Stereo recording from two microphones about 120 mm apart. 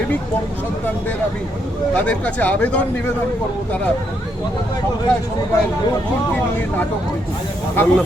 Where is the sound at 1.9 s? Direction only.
10° left (ahead or behind).